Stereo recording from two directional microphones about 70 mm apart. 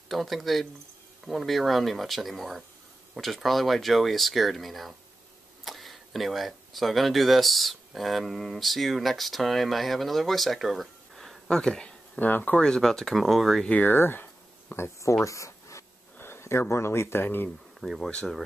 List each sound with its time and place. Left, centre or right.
0.1 s speech: centre
12.2 s speech: left
12.5 s speech: centre
13.7 s a sound: left
15.2 s a sound: left
16.2 s speech: left
17.7 s speech: centre